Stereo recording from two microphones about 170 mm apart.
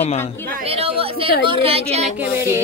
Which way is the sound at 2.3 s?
15° right (ahead or behind).